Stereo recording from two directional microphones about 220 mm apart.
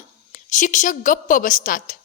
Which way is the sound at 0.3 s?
35° left (ahead or behind).